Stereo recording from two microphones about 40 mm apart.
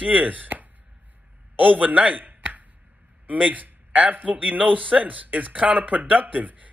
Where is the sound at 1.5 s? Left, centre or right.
Right.